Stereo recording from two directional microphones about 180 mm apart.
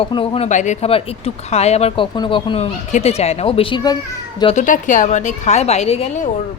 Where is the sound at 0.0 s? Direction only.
30° left (ahead or behind).